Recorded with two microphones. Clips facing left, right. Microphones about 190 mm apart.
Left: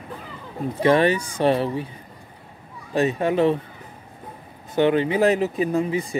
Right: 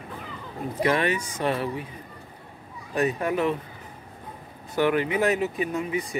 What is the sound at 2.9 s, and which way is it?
Speech, 25° left (ahead or behind).